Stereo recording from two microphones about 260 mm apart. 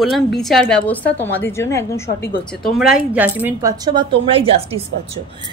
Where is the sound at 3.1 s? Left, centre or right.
Centre.